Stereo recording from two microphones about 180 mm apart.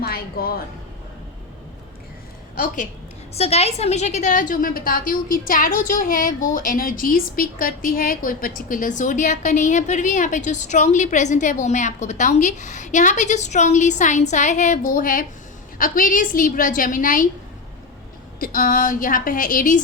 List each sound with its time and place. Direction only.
0.0 s a woman's voice: 55° left (ahead or behind)
3.3 s a woman's voice: 35° left (ahead or behind)
18.3 s a woman's voice: 50° left (ahead or behind)